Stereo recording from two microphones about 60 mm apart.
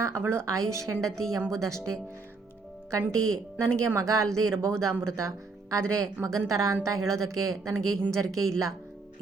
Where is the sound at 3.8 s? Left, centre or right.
Right.